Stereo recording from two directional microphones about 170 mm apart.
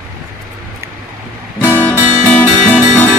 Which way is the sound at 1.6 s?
10° left (ahead or behind).